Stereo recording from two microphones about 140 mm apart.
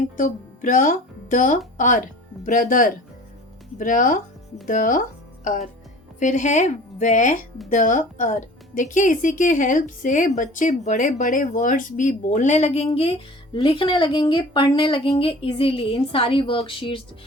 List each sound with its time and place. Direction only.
0.2 s a woman's voice: 70° left (ahead or behind); by 17.0 s 40° left (ahead or behind)